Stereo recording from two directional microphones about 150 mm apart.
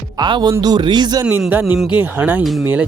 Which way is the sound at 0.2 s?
30° right (ahead or behind).